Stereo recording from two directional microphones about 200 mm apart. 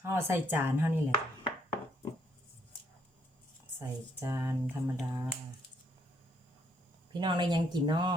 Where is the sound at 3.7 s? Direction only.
15° right (ahead or behind).